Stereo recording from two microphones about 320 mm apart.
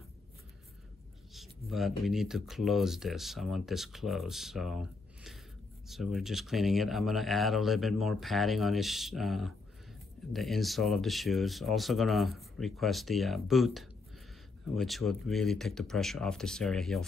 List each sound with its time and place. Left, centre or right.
1.3 s speech: centre